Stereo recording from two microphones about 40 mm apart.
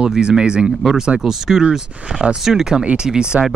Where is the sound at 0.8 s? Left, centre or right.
Centre.